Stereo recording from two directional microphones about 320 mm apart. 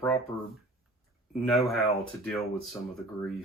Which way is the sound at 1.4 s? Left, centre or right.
Centre.